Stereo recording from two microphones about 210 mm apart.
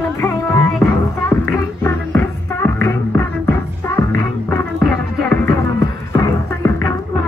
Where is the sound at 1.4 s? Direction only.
10° left (ahead or behind).